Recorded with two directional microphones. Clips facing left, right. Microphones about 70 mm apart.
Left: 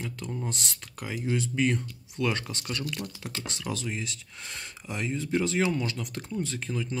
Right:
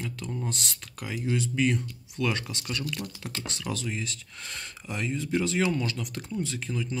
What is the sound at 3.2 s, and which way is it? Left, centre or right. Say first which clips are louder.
Speech: right 1 dB; centre.